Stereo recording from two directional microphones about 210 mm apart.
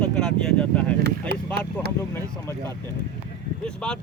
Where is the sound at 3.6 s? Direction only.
5° left (ahead or behind).